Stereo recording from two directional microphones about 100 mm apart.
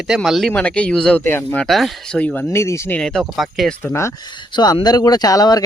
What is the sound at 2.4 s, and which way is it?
Speech, 30° left (ahead or behind).